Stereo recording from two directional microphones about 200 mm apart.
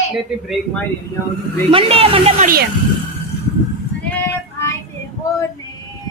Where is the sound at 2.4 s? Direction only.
50° right (ahead or behind).